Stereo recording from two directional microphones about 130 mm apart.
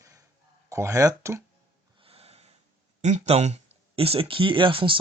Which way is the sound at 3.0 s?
60° right (ahead or behind).